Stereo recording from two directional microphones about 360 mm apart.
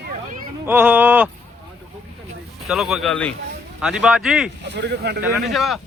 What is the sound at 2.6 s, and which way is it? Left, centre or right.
Speech, centre.